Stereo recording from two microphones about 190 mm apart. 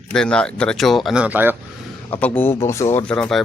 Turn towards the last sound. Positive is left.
turn(degrees=5)  # may be behind; listen again after turning